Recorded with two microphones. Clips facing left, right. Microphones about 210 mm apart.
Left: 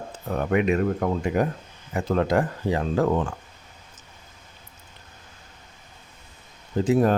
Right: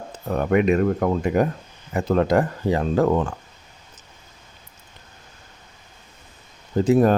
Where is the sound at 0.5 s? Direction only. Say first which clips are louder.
Right 3 dB; 40° right (ahead or behind).